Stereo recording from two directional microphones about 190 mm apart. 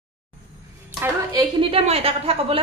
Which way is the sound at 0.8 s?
15° right (ahead or behind).